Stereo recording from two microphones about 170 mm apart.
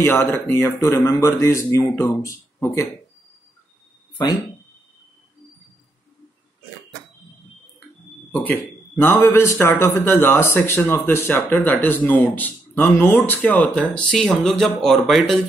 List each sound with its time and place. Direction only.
0.0 s speech: 15° left (ahead or behind)
8.3 s speech: 10° left (ahead or behind)